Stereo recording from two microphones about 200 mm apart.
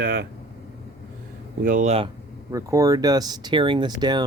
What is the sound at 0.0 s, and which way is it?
Vehicle, 45° right (ahead or behind).